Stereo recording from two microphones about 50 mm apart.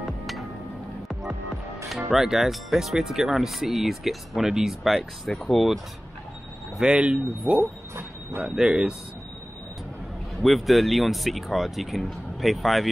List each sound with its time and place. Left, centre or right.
0.0 s music: centre
2.0 s speech: centre
6.8 s speech: right
10.4 s speech: centre